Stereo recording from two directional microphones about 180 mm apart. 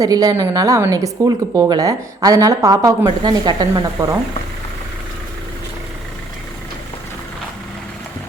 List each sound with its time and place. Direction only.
0.0 s a woman's voice: 20° right (ahead or behind)